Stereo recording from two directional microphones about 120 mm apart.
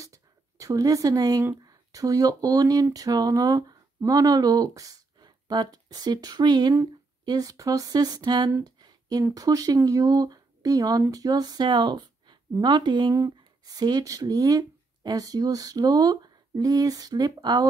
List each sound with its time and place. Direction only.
0.0 s speech: 25° right (ahead or behind)
8.6 s a sound: 35° right (ahead or behind)
9.2 s speech: 30° right (ahead or behind)